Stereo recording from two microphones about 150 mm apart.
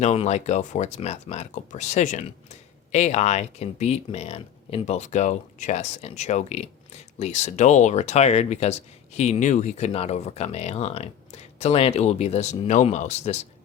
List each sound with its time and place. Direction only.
0.0 s speech: 50° left (ahead or behind)